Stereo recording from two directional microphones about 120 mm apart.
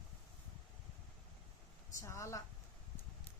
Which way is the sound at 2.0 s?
25° left (ahead or behind).